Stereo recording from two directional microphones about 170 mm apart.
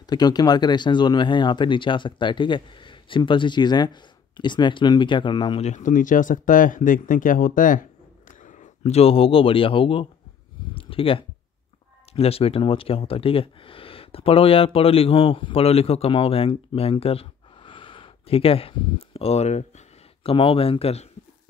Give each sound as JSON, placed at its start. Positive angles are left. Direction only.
{"t": 0.0, "sound": "speech", "side_deg": 25}
{"t": 5.6, "sound": "speech", "side_deg": 45}
{"t": 10.7, "sound": "a sound", "side_deg": 30}
{"t": 12.1, "sound": "speech", "side_deg": 35}